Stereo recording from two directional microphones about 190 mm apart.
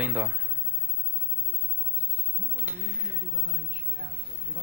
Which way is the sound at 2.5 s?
10° right (ahead or behind).